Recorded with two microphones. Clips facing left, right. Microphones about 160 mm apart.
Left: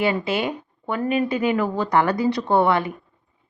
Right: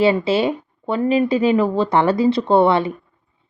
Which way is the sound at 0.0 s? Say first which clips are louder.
Right 6 dB; 25° right (ahead or behind).